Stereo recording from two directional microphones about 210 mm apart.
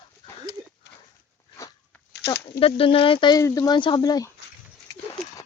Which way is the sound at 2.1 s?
55° left (ahead or behind).